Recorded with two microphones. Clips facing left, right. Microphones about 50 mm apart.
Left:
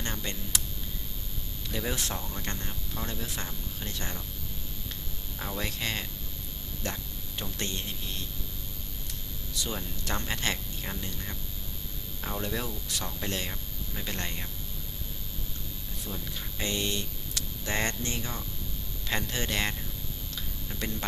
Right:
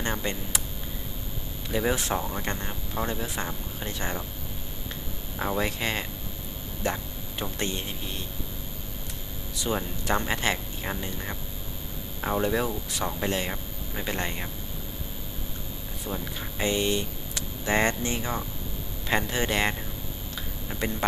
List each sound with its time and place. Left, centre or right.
0.0 s speech: centre
1.7 s speech: centre
5.4 s speech: centre
9.6 s speech: centre
16.0 s speech: centre
20.7 s a sound: centre